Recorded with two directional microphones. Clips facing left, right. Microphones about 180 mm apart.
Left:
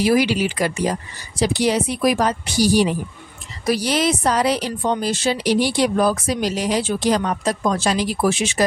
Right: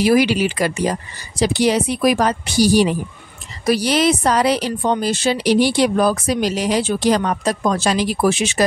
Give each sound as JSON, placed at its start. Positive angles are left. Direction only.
{"t": 0.0, "sound": "speech", "side_deg": -70}